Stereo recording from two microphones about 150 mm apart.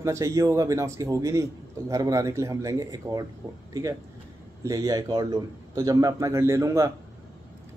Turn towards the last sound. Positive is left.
turn(degrees=-20)  # may be behind; listen again after turning